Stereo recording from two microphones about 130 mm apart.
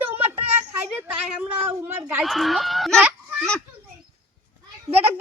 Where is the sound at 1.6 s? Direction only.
15° right (ahead or behind).